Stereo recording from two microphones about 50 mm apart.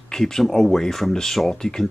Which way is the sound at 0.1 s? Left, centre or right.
Centre.